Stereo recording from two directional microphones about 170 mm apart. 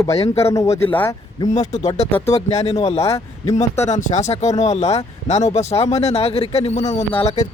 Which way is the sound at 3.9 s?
40° left (ahead or behind).